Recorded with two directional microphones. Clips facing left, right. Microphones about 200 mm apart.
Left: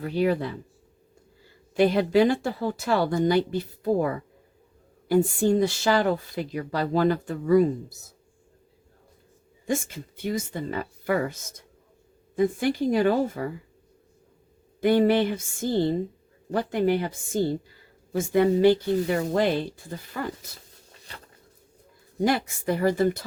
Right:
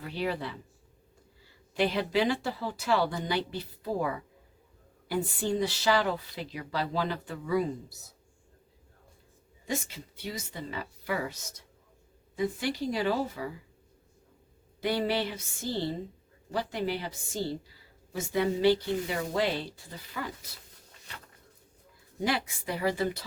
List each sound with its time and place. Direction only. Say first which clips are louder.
0.0 s speech: left 9 dB; 45° left (ahead or behind)
1.7 s speech: left 8 dB; 45° left (ahead or behind)
9.6 s speech: left 7 dB; 50° left (ahead or behind)
14.8 s speech: left 9 dB; 50° left (ahead or behind)
22.2 s speech: left 7 dB; 45° left (ahead or behind)